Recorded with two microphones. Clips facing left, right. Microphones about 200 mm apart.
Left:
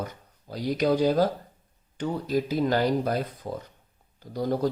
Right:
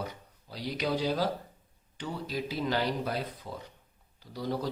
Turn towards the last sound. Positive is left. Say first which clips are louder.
# left 7 dB
turn(degrees=45)  # may be behind; listen again after turning